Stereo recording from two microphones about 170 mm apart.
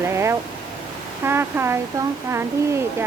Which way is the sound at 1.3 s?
15° right (ahead or behind).